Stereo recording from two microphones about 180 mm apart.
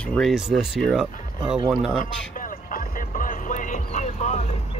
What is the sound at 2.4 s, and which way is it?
Music, 50° left (ahead or behind).